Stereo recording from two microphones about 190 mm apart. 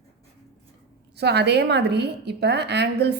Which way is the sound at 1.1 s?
60° right (ahead or behind).